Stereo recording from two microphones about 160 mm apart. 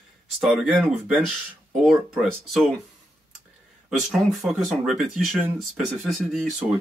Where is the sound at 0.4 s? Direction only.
Centre (ahead or behind).